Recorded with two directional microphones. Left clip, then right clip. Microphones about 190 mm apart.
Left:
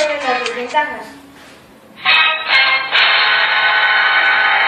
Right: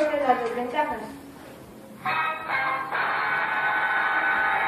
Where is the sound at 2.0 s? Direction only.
40° left (ahead or behind).